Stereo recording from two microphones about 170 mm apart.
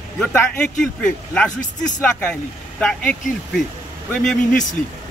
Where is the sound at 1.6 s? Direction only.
50° left (ahead or behind).